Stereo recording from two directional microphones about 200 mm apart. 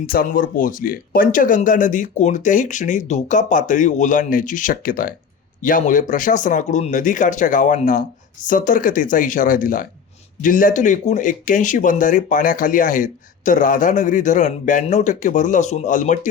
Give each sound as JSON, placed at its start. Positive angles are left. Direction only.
{"t": 0.0, "sound": "speech", "side_deg": 45}